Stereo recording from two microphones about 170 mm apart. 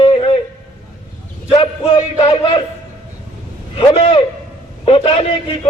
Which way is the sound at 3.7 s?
35° left (ahead or behind).